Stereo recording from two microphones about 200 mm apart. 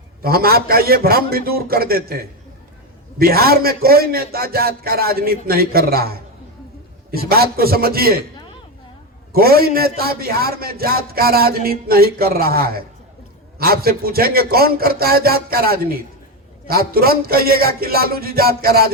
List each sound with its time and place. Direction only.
0.2 s a man's voice: 50° right (ahead or behind)
9.3 s a man's voice: 50° right (ahead or behind)